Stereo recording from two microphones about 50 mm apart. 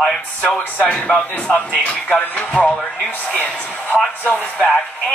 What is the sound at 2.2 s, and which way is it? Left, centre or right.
Speech, left.